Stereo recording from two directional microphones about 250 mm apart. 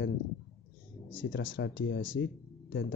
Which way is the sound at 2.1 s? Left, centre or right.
Left.